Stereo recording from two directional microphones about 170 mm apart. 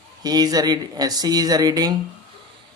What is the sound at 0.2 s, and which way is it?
Speech, 25° right (ahead or behind).